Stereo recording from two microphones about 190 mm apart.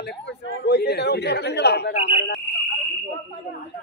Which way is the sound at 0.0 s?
60° left (ahead or behind).